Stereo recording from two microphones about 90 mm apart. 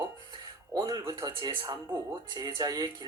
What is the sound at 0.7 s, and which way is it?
Speech, 45° right (ahead or behind).